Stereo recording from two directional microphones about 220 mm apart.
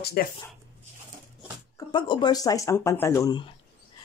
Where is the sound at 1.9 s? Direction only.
20° left (ahead or behind).